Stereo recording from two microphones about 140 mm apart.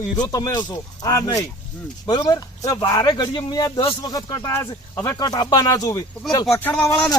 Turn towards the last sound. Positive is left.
turn(degrees=15)  # may be behind; listen again after turning